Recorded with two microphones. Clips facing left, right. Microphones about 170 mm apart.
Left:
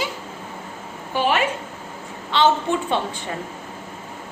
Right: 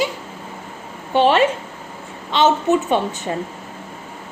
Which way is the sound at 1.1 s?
30° right (ahead or behind).